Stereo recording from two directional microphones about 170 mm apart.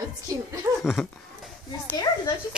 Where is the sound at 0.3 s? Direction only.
20° right (ahead or behind).